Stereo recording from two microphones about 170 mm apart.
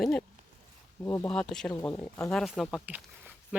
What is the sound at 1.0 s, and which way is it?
Speech, 15° left (ahead or behind).